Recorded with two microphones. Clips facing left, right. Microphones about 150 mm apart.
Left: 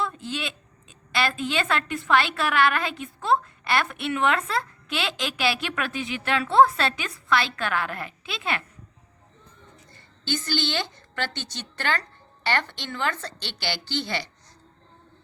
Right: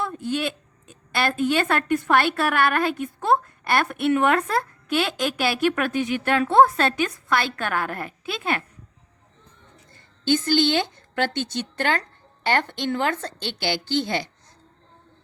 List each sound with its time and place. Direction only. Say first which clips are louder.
0.0 s a woman's voice: right 4 dB; 50° right (ahead or behind)
10.2 s a woman's voice: right 8 dB; 50° right (ahead or behind)